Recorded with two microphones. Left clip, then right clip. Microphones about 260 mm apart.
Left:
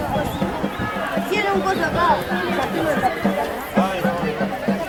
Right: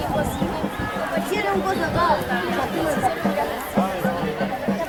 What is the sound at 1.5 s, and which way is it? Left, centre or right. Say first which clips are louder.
Chatter: left 2 dB; centre.